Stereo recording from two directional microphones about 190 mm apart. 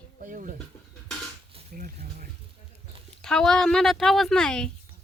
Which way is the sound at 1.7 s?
45° right (ahead or behind).